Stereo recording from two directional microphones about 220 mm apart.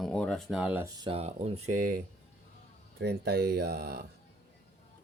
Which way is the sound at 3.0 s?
45° right (ahead or behind).